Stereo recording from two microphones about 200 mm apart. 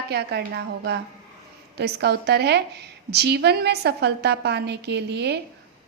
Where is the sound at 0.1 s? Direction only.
55° right (ahead or behind).